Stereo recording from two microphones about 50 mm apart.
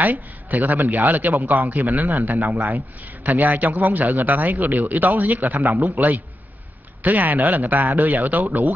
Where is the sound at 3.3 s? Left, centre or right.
Right.